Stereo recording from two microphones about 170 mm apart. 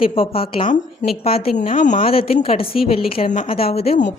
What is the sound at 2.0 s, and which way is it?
Speech, 35° left (ahead or behind).